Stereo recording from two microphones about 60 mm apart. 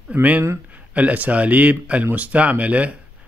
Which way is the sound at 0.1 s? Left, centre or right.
Right.